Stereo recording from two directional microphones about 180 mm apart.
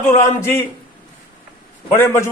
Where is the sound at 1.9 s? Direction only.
15° left (ahead or behind).